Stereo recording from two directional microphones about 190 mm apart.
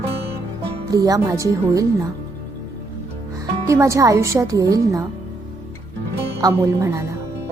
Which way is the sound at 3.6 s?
15° right (ahead or behind).